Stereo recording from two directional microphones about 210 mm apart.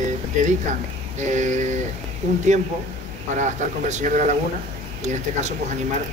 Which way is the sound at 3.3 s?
35° right (ahead or behind).